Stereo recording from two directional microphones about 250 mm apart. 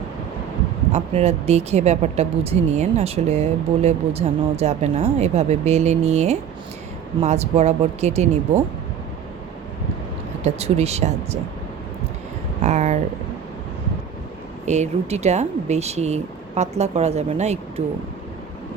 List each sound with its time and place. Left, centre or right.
0.9 s speech: right
10.4 s speech: right
12.6 s a sound: right
14.6 s speech: right